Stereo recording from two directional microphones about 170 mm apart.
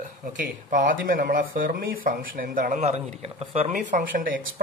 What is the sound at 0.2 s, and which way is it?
Speech, 55° right (ahead or behind).